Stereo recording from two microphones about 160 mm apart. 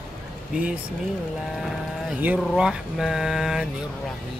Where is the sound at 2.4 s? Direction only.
Centre (ahead or behind).